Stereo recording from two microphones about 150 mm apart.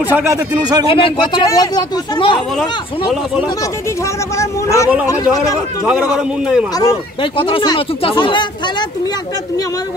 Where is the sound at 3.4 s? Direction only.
20° left (ahead or behind).